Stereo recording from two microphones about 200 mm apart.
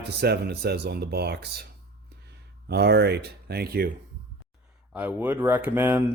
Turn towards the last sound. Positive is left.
turn(degrees=-10)  # may be behind; listen again after turning